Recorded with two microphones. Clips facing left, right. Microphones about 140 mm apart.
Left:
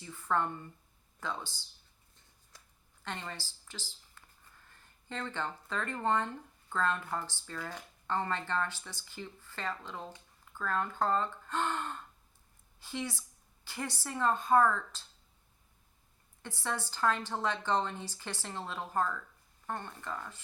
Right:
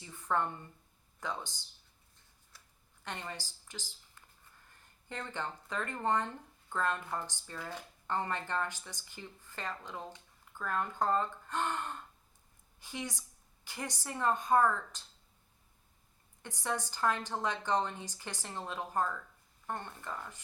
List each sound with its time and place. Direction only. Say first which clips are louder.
0.0 s a sound: left 1 dB; 20° right (ahead or behind)
1.2 s speech: even; 15° right (ahead or behind)
3.0 s a woman's voice: left 1 dB; 15° right (ahead or behind)
5.0 s speech: left 2 dB; 15° right (ahead or behind)
16.4 s speech: right 1 dB; 15° right (ahead or behind)